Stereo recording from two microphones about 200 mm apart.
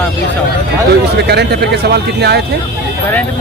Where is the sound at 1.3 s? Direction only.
55° right (ahead or behind).